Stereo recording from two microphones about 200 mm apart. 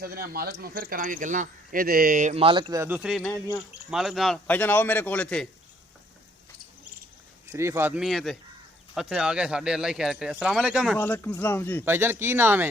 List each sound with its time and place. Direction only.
0.0 s speech: 50° right (ahead or behind); by 5.5 s 5° left (ahead or behind)
7.5 s speech: 10° right (ahead or behind)
10.9 s speech: 10° left (ahead or behind)
11.9 s speech: 10° right (ahead or behind)